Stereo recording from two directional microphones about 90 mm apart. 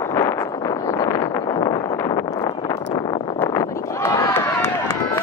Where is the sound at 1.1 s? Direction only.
35° left (ahead or behind).